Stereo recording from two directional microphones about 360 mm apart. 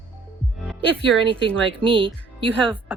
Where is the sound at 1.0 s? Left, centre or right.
Centre.